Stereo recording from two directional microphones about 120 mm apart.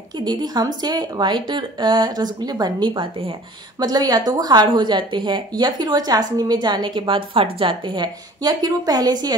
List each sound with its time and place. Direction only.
0.2 s a woman's voice: 35° right (ahead or behind)